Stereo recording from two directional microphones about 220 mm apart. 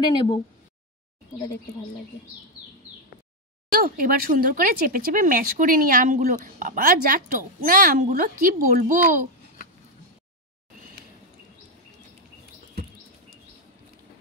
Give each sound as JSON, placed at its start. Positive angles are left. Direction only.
{"t": 0.0, "sound": "speech", "side_deg": 20}
{"t": 3.7, "sound": "speech", "side_deg": -40}